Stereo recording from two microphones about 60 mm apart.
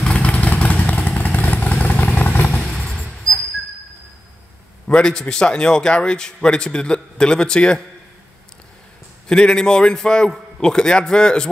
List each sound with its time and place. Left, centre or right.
0.0 s vehicle: centre
2.0 s vehicle: centre
2.8 s a sound: centre
4.8 s a man's voice: centre
9.3 s a man's voice: centre